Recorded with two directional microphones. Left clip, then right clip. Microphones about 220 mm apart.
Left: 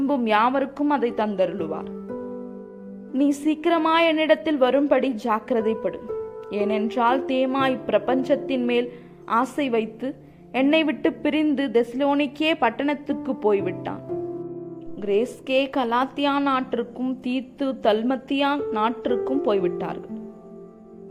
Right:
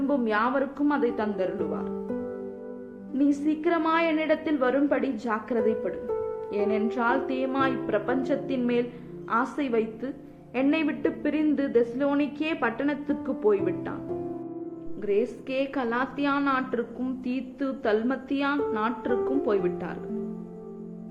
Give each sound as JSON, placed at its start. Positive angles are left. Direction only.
{"t": 0.1, "sound": "a woman's voice", "side_deg": 35}
{"t": 3.1, "sound": "a woman's voice", "side_deg": 35}
{"t": 15.0, "sound": "a woman's voice", "side_deg": 30}